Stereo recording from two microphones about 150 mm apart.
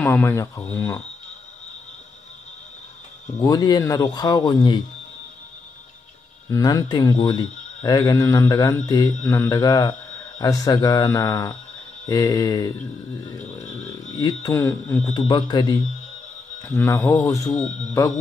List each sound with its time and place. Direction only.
0.0 s speech: 15° left (ahead or behind)
3.3 s a man's voice: 25° left (ahead or behind)
6.5 s a man's voice: 25° left (ahead or behind)
9.2 s a man's voice: 15° left (ahead or behind)
14.1 s a man's voice: 25° left (ahead or behind)
14.5 s speech: 15° left (ahead or behind)
15.1 s a man's voice: 30° left (ahead or behind)
16.6 s speech: 15° left (ahead or behind)
17.6 s speech: 55° left (ahead or behind)